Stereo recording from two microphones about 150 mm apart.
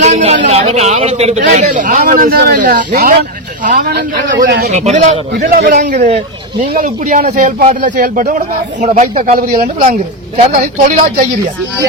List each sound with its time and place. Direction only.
0.0 s a man's voice: 45° right (ahead or behind); by 4.7 s 80° right
4.7 s a man's voice: 50° right (ahead or behind)
5.3 s speech: 85° right
10.5 s speech: 65° right (ahead or behind)